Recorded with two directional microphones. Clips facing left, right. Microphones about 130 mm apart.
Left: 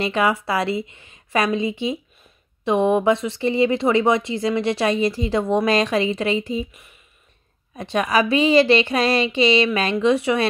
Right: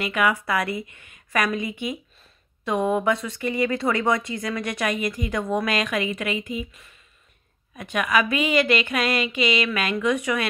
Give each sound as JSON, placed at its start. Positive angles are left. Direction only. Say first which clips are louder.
{"t": 0.0, "sound": "a woman's voice", "louder": "left 3 dB", "side_deg": 30}